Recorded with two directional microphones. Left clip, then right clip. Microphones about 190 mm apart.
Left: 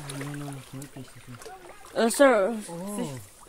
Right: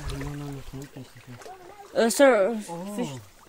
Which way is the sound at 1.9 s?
35° right (ahead or behind).